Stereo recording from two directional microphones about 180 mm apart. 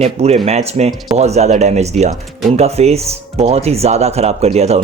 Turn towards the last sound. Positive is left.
turn(degrees=-35)  # may be behind; listen again after turning